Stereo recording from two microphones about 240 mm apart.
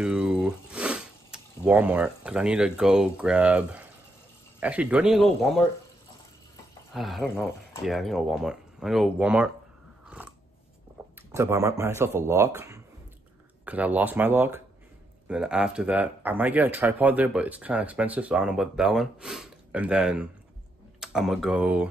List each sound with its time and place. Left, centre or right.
0.0 s speech: centre
6.9 s speech: centre
10.0 s biting: centre
11.0 s a sound: centre
11.3 s speech: centre